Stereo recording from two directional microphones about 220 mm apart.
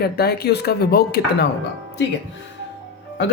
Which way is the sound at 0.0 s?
45° left (ahead or behind).